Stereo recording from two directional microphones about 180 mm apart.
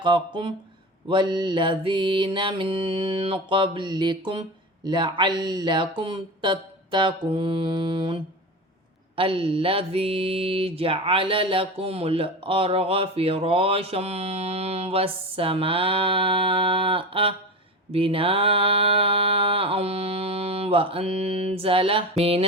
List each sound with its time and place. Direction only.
0.0 s mantra: 25° right (ahead or behind)